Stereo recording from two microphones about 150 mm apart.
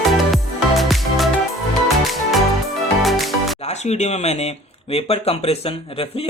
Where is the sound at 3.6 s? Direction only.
45° left (ahead or behind).